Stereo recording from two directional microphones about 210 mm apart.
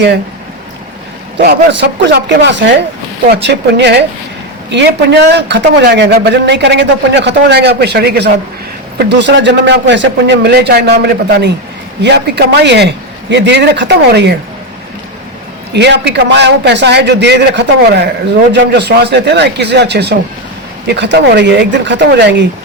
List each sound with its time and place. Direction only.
1.4 s a man's voice: 55° right (ahead or behind)
15.7 s a man's voice: 55° right (ahead or behind)